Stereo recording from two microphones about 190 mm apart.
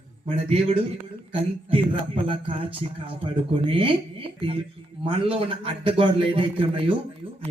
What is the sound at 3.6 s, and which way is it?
A man's voice, 25° right (ahead or behind).